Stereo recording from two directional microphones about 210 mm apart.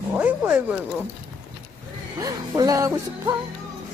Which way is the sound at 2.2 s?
15° right (ahead or behind).